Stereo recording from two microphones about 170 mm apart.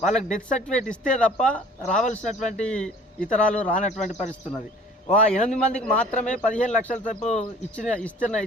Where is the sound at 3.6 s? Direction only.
50° left (ahead or behind).